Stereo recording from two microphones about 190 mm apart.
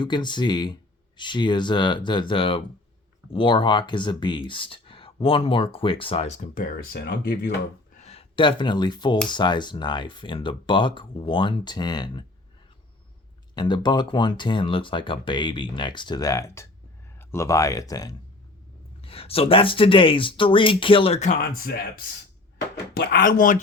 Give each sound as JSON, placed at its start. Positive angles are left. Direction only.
{"t": 0.0, "sound": "speech", "side_deg": 25}
{"t": 8.0, "sound": "speech", "side_deg": 30}
{"t": 13.6, "sound": "speech", "side_deg": 25}
{"t": 19.0, "sound": "speech", "side_deg": 30}
{"t": 23.0, "sound": "speech", "side_deg": 45}